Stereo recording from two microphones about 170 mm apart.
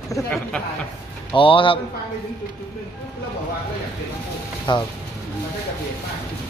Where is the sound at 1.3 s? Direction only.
30° left (ahead or behind).